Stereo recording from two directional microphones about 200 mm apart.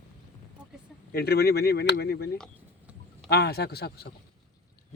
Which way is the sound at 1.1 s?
55° left (ahead or behind).